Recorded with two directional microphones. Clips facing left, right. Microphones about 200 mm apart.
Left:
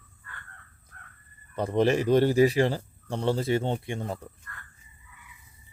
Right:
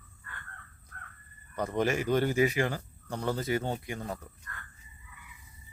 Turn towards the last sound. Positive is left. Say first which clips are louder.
# left 4 dB
turn(degrees=25)  # may be behind; listen again after turning